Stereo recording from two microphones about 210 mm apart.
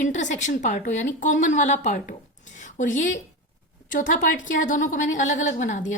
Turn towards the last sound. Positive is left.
turn(degrees=35)  # may be behind; listen again after turning